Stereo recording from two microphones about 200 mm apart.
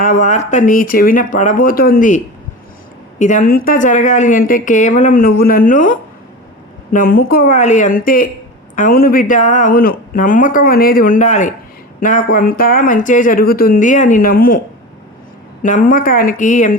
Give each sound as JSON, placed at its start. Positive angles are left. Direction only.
{"t": 0.0, "sound": "a woman's voice", "side_deg": 40}
{"t": 15.6, "sound": "speech", "side_deg": 40}